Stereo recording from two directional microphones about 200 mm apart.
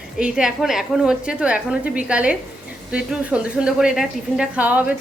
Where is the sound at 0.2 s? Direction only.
5° right (ahead or behind).